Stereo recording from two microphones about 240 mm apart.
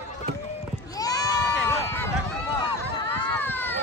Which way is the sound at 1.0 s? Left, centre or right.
Centre.